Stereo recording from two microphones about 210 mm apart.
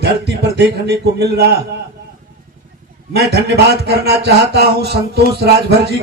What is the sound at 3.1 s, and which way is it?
A man's voice, 50° right (ahead or behind).